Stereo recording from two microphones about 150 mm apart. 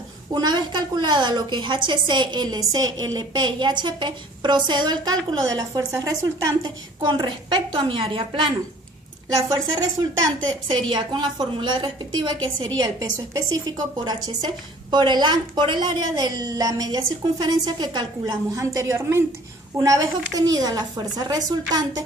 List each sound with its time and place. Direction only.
0.3 s a woman's voice: 30° right (ahead or behind)